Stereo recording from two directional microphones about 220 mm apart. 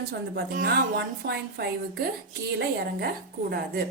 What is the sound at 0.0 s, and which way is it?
A woman's voice, 45° right (ahead or behind).